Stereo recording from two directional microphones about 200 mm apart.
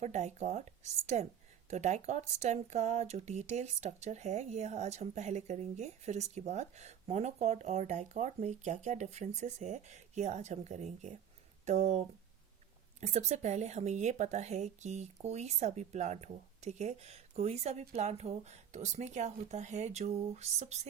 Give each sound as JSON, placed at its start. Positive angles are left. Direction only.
{"t": 0.0, "sound": "speech", "side_deg": -35}